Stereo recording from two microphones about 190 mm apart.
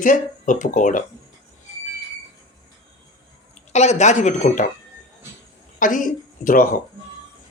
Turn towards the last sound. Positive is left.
turn(degrees=45)  # may be behind; listen again after turning